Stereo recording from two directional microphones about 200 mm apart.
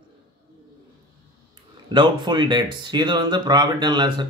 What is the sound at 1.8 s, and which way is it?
Speech, 20° right (ahead or behind).